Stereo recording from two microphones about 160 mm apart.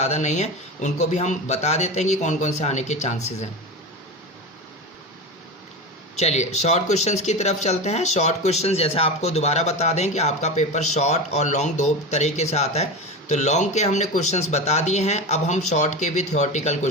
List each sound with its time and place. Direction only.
0.0 s speech: 45° left (ahead or behind)
6.1 s speech: 45° left (ahead or behind)